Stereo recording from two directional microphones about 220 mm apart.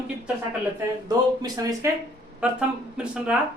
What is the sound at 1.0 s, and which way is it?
Speech, 15° right (ahead or behind).